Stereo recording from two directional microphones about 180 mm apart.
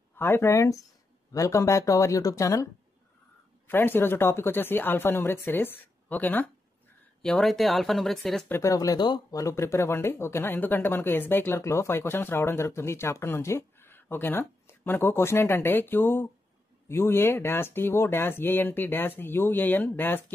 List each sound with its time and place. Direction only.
0.1 s speech: 10° left (ahead or behind)
8.5 s speech: 15° left (ahead or behind)